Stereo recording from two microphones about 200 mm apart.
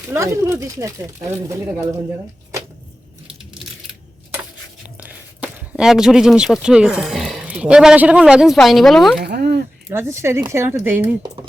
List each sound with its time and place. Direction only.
0.1 s speech: 15° right (ahead or behind)
4.9 s speech: 5° right (ahead or behind)
9.2 s speech: 55° right (ahead or behind)
9.9 s speech: 10° right (ahead or behind)